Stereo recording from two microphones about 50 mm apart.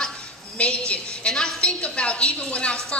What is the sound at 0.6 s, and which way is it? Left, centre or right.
A woman's voice, left.